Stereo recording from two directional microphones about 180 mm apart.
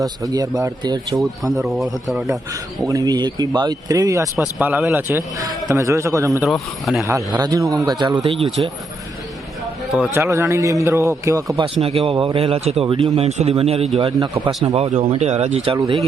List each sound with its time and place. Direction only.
0.0 s speech: 20° right (ahead or behind)
1.2 s speech: centre (ahead or behind)
2.5 s speech: 20° right (ahead or behind)
6.4 s speech: centre (ahead or behind)
7.1 s speech: 20° right (ahead or behind)
9.9 s speech: 5° right (ahead or behind)
10.2 s speech: 15° right (ahead or behind)
11.6 s a man's voice: 35° right (ahead or behind)